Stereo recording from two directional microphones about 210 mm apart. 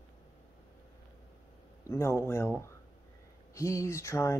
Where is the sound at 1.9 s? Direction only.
15° left (ahead or behind).